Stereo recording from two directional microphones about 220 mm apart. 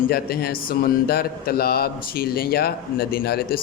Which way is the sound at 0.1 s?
45° left (ahead or behind).